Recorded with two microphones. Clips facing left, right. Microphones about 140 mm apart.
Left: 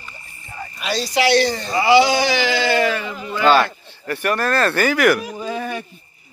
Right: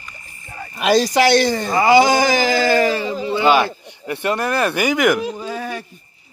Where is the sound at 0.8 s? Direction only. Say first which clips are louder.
Right 6 dB; 45° right (ahead or behind); by 3.4 s 30° right (ahead or behind).